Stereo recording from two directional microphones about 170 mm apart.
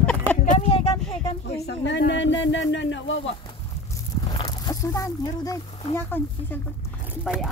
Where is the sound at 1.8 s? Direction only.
90° left.